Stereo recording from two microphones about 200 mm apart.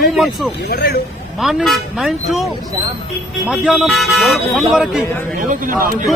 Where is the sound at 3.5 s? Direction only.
5° right (ahead or behind).